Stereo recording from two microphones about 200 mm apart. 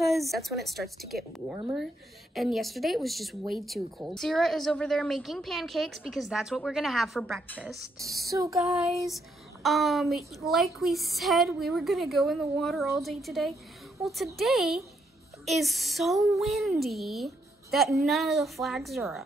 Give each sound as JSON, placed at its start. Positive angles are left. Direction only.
{"t": 0.0, "sound": "a woman's voice", "side_deg": 0}
{"t": 8.3, "sound": "female singing", "side_deg": -15}
{"t": 9.1, "sound": "a woman's voice", "side_deg": 0}